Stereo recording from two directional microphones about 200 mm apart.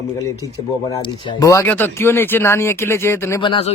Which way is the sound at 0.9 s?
25° left (ahead or behind).